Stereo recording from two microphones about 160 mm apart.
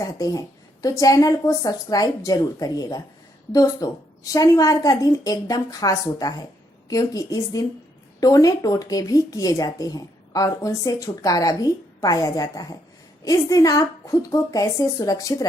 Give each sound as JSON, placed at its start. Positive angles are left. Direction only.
{"t": 0.0, "sound": "speech", "side_deg": 20}